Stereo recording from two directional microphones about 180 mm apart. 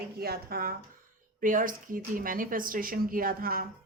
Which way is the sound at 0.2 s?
60° right (ahead or behind).